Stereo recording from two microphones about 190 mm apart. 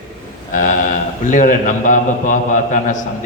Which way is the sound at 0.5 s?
45° left (ahead or behind).